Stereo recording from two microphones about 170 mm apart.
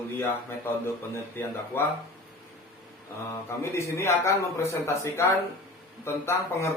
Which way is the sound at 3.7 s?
15° left (ahead or behind).